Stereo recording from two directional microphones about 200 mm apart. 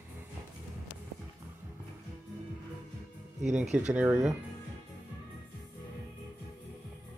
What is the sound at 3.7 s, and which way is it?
Speech, 5° right (ahead or behind).